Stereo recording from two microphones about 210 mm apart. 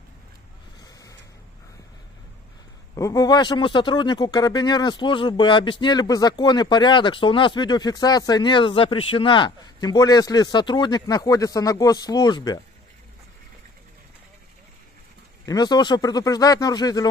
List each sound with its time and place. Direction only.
2.9 s a man's voice: 15° left (ahead or behind)
15.4 s a man's voice: 20° left (ahead or behind)